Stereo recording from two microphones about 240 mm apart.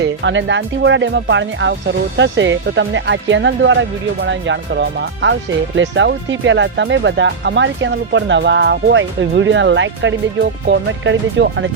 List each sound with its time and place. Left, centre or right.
0.0 s speech: right